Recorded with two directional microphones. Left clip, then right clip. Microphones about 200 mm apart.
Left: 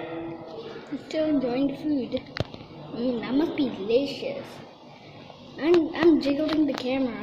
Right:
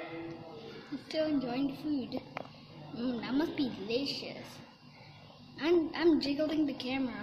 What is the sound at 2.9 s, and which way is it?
A woman's voice, 15° right (ahead or behind).